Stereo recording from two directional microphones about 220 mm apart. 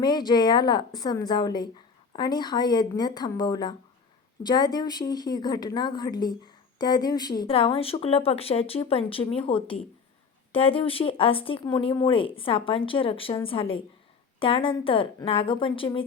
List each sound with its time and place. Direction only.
0.0 s speech: 20° left (ahead or behind)